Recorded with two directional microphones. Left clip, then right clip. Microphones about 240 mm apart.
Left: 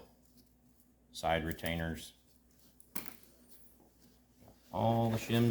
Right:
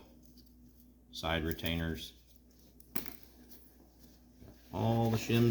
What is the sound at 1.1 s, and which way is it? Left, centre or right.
Speech, left.